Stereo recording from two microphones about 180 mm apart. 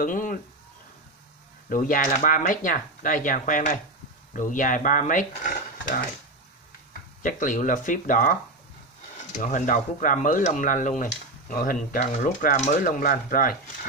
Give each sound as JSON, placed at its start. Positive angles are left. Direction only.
{"t": 0.0, "sound": "speech", "side_deg": 50}
{"t": 1.7, "sound": "speech", "side_deg": 50}
{"t": 7.2, "sound": "speech", "side_deg": 45}